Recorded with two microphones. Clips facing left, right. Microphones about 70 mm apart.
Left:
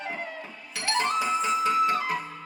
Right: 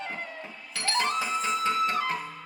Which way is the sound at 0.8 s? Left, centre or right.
Left.